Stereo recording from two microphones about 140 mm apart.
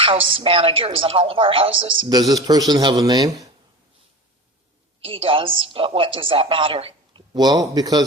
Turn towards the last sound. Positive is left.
turn(degrees=-25)  # may be behind; listen again after turning